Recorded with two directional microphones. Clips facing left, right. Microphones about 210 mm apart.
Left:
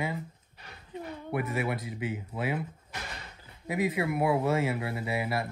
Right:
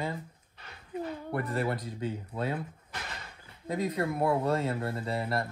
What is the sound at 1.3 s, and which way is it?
Speech, centre (ahead or behind).